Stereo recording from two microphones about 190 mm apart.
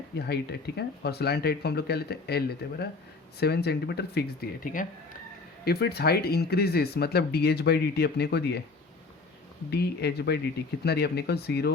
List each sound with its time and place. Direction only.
0.2 s speech: 60° left (ahead or behind)
5.6 s speech: 55° left (ahead or behind)
9.6 s speech: 60° left (ahead or behind)